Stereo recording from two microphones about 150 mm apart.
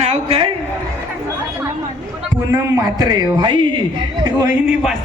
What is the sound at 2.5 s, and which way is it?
A man's voice, 20° right (ahead or behind).